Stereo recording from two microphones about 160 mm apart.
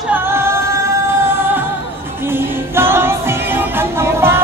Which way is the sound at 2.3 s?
15° right (ahead or behind).